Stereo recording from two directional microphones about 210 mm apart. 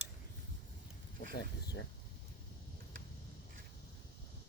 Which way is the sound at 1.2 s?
50° left (ahead or behind).